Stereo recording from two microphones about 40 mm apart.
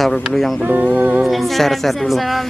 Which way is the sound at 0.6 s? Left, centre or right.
Right.